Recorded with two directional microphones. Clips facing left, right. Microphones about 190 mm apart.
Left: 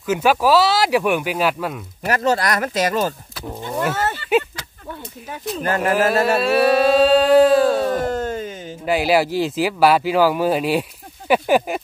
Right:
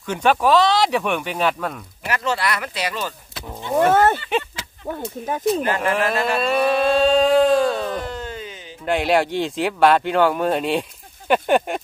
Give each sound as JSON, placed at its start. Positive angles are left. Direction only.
{"t": 0.0, "sound": "speech", "side_deg": 5}
{"t": 2.0, "sound": "speech", "side_deg": 40}
{"t": 3.9, "sound": "speech", "side_deg": -55}
{"t": 5.8, "sound": "speech", "side_deg": 5}
{"t": 7.9, "sound": "a sound", "side_deg": 45}
{"t": 8.8, "sound": "speech", "side_deg": 5}